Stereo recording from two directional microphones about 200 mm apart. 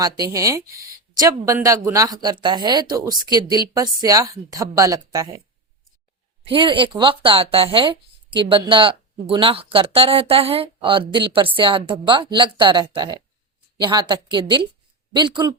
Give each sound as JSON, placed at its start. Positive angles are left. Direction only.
{"t": 0.0, "sound": "speech", "side_deg": -15}
{"t": 6.5, "sound": "speech", "side_deg": -25}